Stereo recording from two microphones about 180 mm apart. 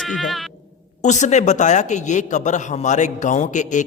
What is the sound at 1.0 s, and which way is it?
A man's voice, 40° left (ahead or behind).